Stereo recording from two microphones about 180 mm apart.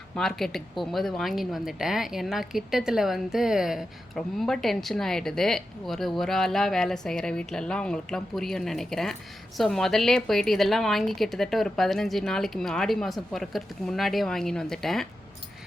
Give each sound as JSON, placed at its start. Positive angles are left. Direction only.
{"t": 0.2, "sound": "a woman's voice", "side_deg": 0}